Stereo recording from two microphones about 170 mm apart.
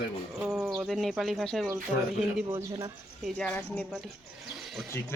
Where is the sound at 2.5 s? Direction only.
15° right (ahead or behind).